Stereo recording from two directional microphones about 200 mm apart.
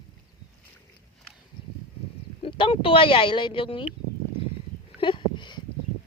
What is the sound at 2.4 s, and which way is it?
Speech, 25° left (ahead or behind).